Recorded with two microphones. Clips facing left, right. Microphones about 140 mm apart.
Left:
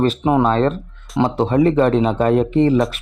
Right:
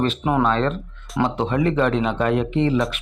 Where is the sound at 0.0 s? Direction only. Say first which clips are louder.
Left 4 dB; 40° left (ahead or behind).